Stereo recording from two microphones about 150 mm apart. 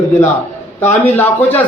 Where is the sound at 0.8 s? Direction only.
15° left (ahead or behind).